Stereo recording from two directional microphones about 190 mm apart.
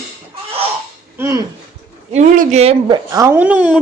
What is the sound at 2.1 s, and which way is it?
Speech, 40° right (ahead or behind).